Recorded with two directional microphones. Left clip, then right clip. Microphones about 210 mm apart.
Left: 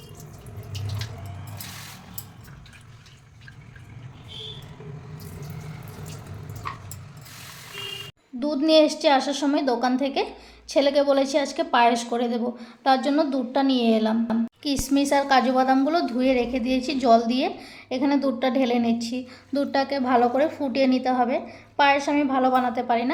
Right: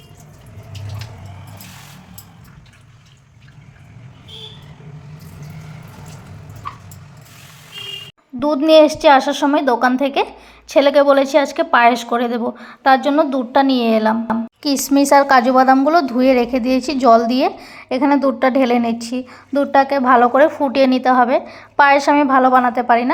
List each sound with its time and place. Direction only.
8.4 s a woman's voice: 15° right (ahead or behind)
20.1 s a woman's voice: 5° right (ahead or behind)
21.9 s a woman's voice: 15° right (ahead or behind)